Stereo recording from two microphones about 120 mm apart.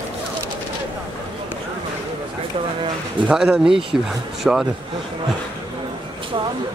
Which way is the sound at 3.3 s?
5° right (ahead or behind).